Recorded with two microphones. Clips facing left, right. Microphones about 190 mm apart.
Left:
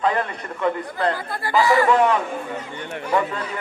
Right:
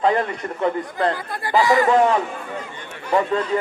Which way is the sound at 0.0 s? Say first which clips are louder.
Right 3 dB; 30° right (ahead or behind).